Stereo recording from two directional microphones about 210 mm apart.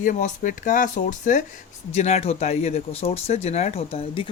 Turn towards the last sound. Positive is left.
turn(degrees=30)  # may be behind; listen again after turning